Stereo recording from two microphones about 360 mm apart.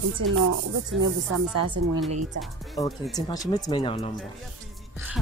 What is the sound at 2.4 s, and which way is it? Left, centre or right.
Speech, centre.